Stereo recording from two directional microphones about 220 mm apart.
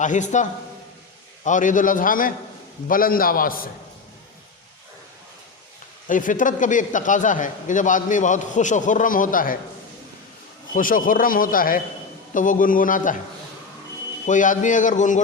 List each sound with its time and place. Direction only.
0.0 s a man's voice: 35° left (ahead or behind)
1.5 s a man's voice: 35° left (ahead or behind)
6.1 s a man's voice: 35° left (ahead or behind)
10.8 s a man's voice: 40° left (ahead or behind)
14.3 s a man's voice: 35° left (ahead or behind)